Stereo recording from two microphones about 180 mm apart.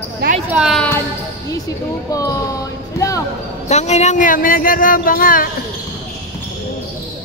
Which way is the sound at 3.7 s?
40° left (ahead or behind).